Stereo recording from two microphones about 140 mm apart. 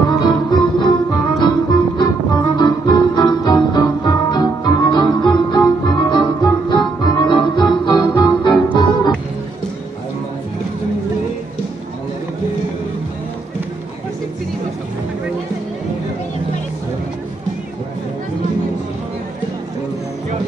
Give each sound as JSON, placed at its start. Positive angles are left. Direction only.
{"t": 0.2, "sound": "music", "side_deg": 30}
{"t": 8.7, "sound": "organ", "side_deg": 30}